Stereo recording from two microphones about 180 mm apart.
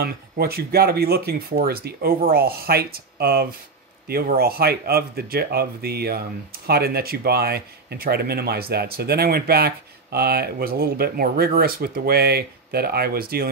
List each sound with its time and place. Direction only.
0.0 s speech: 60° right (ahead or behind)